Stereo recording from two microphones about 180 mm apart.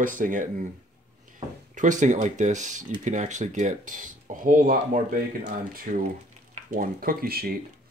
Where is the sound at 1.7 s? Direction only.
45° right (ahead or behind).